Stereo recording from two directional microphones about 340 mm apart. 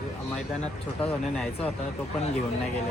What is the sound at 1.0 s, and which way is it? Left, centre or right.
Speech, centre.